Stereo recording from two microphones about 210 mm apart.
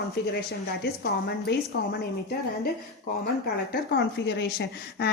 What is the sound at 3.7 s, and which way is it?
Speech, 55° left (ahead or behind).